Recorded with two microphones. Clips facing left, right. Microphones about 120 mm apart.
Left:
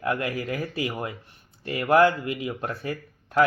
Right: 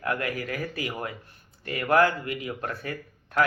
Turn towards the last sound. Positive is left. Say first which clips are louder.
# left 4 dB
turn(degrees=25)  # may be behind; listen again after turning